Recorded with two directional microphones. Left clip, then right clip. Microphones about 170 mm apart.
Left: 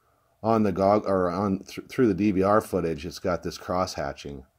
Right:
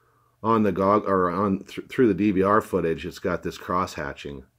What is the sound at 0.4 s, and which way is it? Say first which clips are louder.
Speech: right 1 dB; 35° left (ahead or behind).